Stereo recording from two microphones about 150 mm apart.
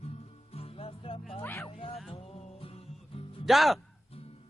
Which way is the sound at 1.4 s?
15° left (ahead or behind).